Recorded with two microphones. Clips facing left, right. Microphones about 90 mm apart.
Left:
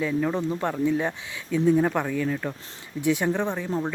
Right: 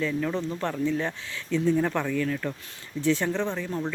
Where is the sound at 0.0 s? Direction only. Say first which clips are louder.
Left 3 dB; 15° left (ahead or behind).